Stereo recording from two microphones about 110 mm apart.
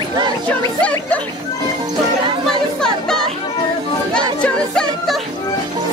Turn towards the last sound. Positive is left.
turn(degrees=5)  # may be behind; listen again after turning